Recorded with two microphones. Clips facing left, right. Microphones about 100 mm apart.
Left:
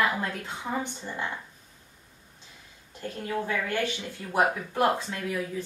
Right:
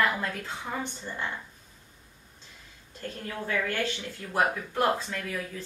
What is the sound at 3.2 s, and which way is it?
Speech, 15° left (ahead or behind).